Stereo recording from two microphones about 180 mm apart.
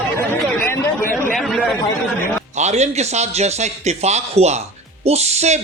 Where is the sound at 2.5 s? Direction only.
40° right (ahead or behind).